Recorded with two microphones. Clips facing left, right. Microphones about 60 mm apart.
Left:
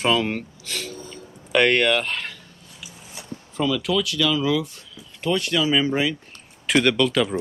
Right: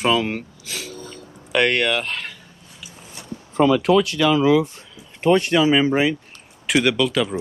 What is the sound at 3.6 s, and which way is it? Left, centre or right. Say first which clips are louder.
Speech: right 7 dB; right.